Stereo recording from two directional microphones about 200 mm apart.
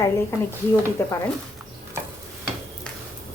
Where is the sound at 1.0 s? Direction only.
15° left (ahead or behind).